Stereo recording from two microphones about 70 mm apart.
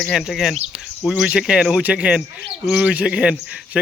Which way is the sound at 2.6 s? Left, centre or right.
Centre.